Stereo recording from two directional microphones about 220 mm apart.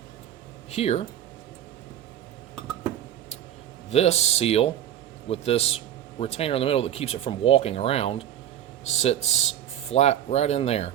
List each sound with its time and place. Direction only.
0.7 s a man's voice: 30° left (ahead or behind)
3.8 s a man's voice: 30° left (ahead or behind)